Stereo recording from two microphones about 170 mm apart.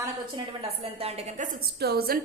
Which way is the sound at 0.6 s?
35° right (ahead or behind).